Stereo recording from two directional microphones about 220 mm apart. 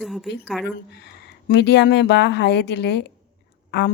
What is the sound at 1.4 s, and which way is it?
Speech, 50° left (ahead or behind).